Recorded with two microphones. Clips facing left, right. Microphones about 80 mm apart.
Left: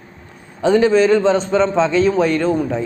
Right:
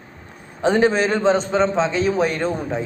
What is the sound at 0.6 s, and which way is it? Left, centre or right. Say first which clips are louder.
A man's voice: left 4 dB; right.